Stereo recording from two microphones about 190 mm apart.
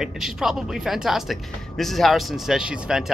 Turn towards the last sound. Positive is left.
turn(degrees=-5)  # may be behind; listen again after turning